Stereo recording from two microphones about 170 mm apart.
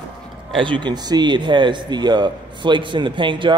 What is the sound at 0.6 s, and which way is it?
A man's voice, 30° right (ahead or behind).